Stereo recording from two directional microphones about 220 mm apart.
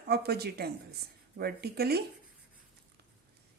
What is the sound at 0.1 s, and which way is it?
Speech, 45° right (ahead or behind).